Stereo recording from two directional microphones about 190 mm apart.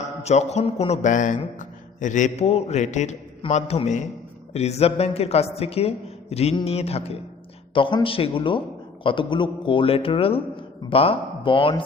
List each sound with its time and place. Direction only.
0.2 s a man's voice: 35° left (ahead or behind)